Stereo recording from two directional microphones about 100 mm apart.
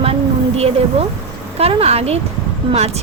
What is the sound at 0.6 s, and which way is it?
Speech, 80° right.